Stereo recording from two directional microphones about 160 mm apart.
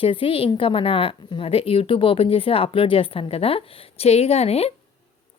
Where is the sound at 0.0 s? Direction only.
35° left (ahead or behind).